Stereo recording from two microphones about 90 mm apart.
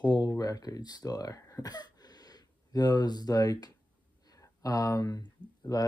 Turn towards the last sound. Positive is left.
turn(degrees=50)  # may be behind; listen again after turning